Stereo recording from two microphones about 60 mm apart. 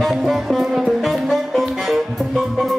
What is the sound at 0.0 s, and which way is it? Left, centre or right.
Music, centre.